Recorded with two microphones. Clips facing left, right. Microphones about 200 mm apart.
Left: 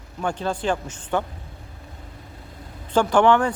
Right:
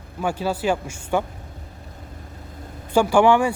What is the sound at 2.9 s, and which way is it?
Speech, 10° right (ahead or behind).